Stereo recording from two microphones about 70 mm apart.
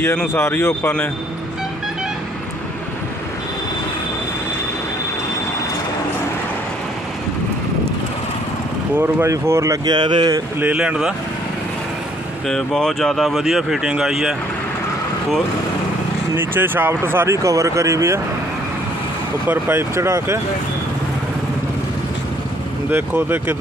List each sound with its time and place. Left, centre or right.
0.3 s speech: left
9.3 s speech: right
9.8 s speech: right
10.6 s speech: centre
12.4 s speech: centre
16.3 s speech: right
17.4 s speech: right
19.4 s speech: right
20.1 s speech: right
22.8 s speech: right